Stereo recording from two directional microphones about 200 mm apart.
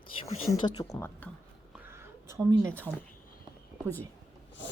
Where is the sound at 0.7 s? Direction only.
15° left (ahead or behind).